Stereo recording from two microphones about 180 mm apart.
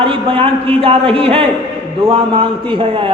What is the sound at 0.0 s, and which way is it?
A man's voice, 30° right (ahead or behind).